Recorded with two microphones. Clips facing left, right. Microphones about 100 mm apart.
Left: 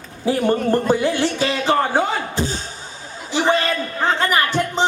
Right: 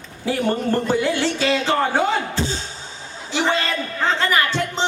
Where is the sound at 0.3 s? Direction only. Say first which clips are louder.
Left 3 dB; 15° left (ahead or behind).